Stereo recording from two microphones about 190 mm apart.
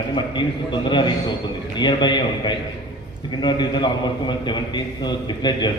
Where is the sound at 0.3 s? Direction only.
25° left (ahead or behind).